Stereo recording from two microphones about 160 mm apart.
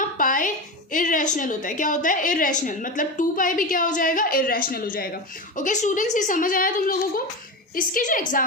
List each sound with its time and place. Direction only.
0.2 s a woman's voice: 55° left (ahead or behind)